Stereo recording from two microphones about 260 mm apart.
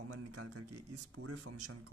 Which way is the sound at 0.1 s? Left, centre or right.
Right.